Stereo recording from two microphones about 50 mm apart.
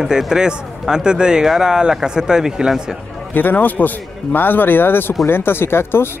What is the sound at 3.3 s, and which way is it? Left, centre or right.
A man's voice, left.